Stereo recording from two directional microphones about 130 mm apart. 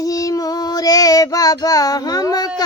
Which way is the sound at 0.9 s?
30° left (ahead or behind).